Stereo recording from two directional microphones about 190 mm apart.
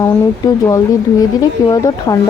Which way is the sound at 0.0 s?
20° left (ahead or behind).